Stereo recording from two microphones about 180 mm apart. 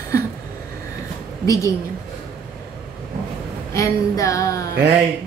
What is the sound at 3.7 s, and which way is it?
A woman's voice, 15° left (ahead or behind).